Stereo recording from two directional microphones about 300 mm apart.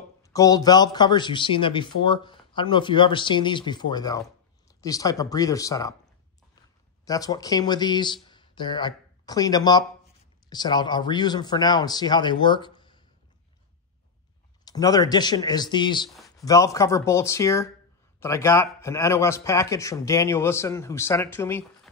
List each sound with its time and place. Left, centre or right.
0.2 s a man's voice: centre
7.1 s a man's voice: centre
14.6 s a man's voice: centre